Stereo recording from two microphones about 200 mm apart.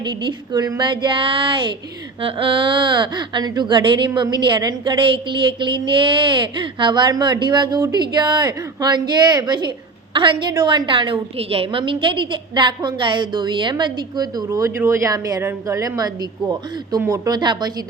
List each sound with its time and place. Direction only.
0.0 s a woman's voice: 20° right (ahead or behind)